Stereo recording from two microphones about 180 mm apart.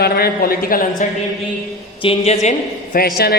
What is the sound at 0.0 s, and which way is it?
Speech, 55° left (ahead or behind).